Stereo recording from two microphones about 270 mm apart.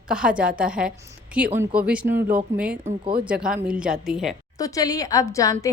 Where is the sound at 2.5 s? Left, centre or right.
Centre.